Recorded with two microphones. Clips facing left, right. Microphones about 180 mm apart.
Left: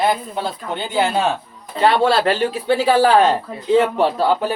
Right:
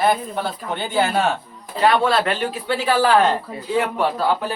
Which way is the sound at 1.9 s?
30° left (ahead or behind).